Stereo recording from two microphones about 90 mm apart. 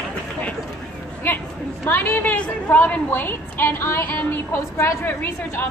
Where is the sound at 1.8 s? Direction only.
25° left (ahead or behind).